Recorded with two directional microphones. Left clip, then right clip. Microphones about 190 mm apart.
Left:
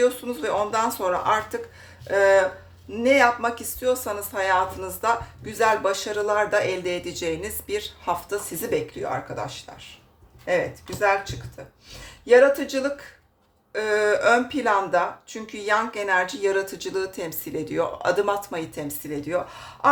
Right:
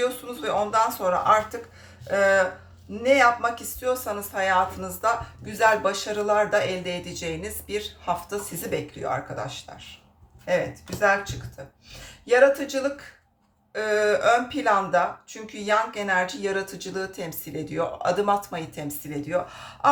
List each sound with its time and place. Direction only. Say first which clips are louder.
0.0 s speech: left 4 dB; 30° left (ahead or behind)
12.2 s speech: left 2 dB; 30° left (ahead or behind)